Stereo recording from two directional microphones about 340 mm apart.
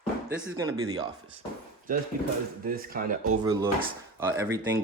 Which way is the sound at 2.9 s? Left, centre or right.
Right.